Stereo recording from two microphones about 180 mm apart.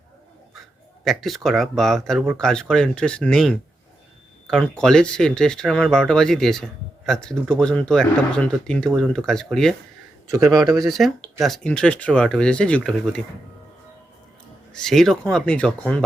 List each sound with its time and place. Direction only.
1.0 s speech: centre (ahead or behind)
10.3 s a man's voice: 20° right (ahead or behind)
10.8 s speech: centre (ahead or behind)
14.7 s speech: 5° left (ahead or behind)